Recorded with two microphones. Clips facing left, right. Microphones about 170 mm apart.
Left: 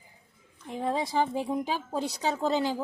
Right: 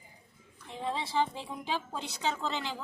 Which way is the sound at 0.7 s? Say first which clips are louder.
Left 5 dB; 45° left (ahead or behind).